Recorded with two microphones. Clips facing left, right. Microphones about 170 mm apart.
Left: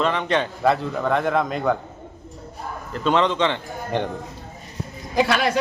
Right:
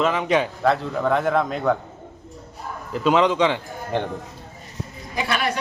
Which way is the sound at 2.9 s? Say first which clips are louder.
Right 2 dB; 5° right (ahead or behind).